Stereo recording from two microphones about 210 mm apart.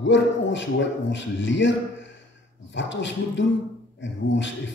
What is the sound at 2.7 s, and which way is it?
A man's voice, 60° left (ahead or behind).